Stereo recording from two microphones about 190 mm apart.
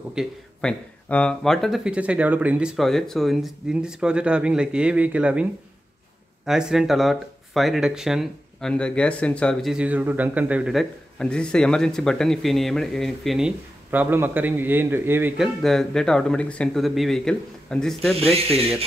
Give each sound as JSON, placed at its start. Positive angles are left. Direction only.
{"t": 0.1, "sound": "speech", "side_deg": 0}
{"t": 13.8, "sound": "speech", "side_deg": -10}
{"t": 18.1, "sound": "speech", "side_deg": -30}